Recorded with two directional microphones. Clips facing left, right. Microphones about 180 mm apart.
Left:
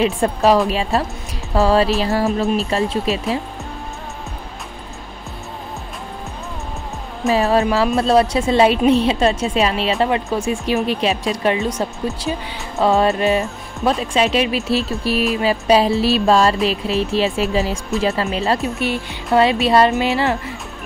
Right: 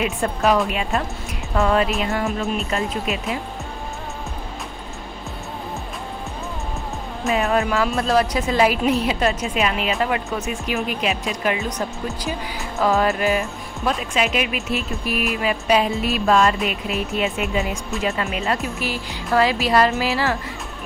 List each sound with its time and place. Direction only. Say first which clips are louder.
0.0 s speech: left 5 dB; 30° left (ahead or behind)
7.3 s a woman's voice: left 4 dB; 35° left (ahead or behind)
12.2 s a woman's voice: left 3 dB; 25° left (ahead or behind)